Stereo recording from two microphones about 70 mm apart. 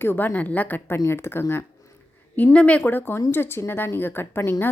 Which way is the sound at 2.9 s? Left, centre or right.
Left.